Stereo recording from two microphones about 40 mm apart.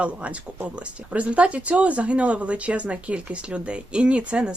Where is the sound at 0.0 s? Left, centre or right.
Right.